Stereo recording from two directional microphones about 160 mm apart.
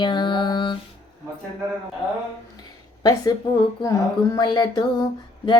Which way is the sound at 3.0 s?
25° left (ahead or behind).